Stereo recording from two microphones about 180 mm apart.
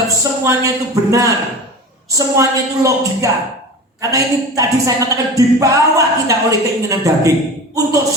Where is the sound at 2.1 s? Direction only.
20° right (ahead or behind).